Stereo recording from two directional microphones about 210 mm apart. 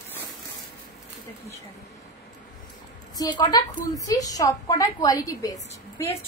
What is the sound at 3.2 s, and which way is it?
A woman's voice, 20° left (ahead or behind).